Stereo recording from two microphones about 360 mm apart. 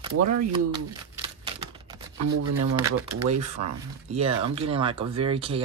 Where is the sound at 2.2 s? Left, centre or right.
Right.